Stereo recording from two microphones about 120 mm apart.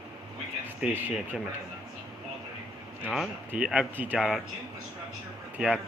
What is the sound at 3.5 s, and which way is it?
Speech, 5° right (ahead or behind).